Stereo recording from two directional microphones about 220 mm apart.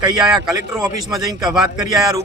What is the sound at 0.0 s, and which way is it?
A man's voice, 20° right (ahead or behind).